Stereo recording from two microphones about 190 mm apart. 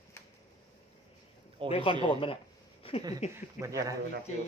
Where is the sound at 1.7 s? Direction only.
30° left (ahead or behind).